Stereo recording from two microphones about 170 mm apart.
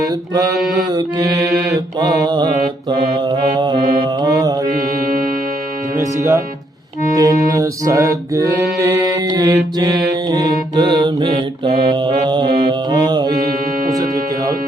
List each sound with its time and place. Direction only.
0.0 s music: 20° right (ahead or behind)
3.2 s mantra: 25° right (ahead or behind)
6.0 s speech: 20° right (ahead or behind)
7.0 s music: 20° right (ahead or behind)
10.2 s mantra: 25° right (ahead or behind)
13.9 s music: 20° right (ahead or behind)